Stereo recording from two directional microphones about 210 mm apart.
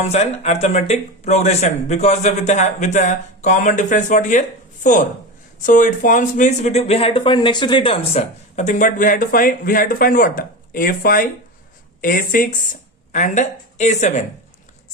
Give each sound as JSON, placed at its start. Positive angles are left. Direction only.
{"t": 0.0, "sound": "speech", "side_deg": 30}